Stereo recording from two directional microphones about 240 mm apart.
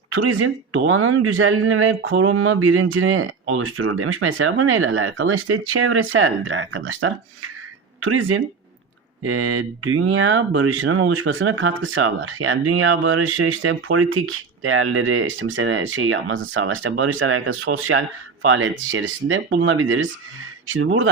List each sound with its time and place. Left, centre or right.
0.1 s speech: right